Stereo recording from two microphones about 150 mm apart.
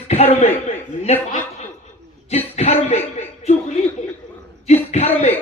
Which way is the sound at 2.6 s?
45° left (ahead or behind).